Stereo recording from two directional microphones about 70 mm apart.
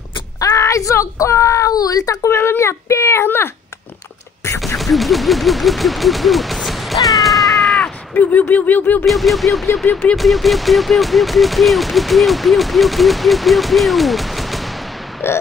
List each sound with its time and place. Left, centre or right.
0.4 s a woman's voice: left
2.2 s speech: left
4.7 s speech: centre
7.2 s cat: centre
8.1 s a sound: left
9.0 s speech: centre
15.2 s speech: left